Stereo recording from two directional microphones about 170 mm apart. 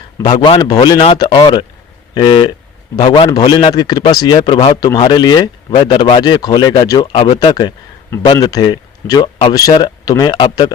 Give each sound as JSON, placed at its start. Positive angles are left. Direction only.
{"t": 0.4, "sound": "a man's voice", "side_deg": 25}
{"t": 7.1, "sound": "speech", "side_deg": 40}
{"t": 7.3, "sound": "speech", "side_deg": 25}